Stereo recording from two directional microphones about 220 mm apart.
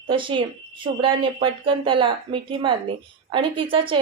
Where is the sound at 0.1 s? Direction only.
25° right (ahead or behind).